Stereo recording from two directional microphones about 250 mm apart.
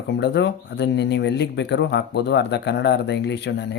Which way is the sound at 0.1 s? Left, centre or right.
Left.